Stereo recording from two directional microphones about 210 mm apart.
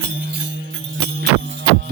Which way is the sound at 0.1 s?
60° right (ahead or behind).